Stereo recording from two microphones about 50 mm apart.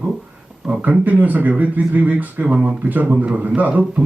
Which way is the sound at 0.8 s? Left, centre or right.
Right.